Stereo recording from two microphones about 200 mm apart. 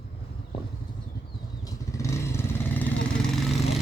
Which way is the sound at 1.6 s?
15° left (ahead or behind).